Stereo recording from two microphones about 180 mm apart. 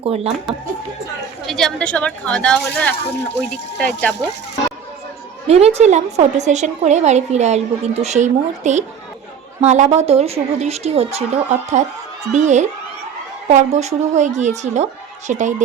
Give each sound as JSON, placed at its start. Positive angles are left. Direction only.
{"t": 0.0, "sound": "a woman's voice", "side_deg": -35}
{"t": 1.5, "sound": "speech", "side_deg": 0}
{"t": 5.5, "sound": "a woman's voice", "side_deg": -35}